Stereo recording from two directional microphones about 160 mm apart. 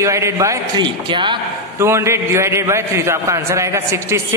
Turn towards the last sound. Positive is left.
turn(degrees=-15)  # may be behind; listen again after turning